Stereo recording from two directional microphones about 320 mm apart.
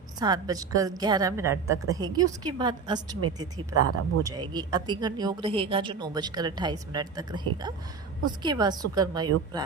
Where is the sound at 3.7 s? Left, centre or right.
Right.